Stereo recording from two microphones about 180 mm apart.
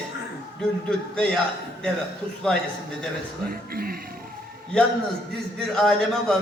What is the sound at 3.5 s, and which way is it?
Speech, 55° right (ahead or behind).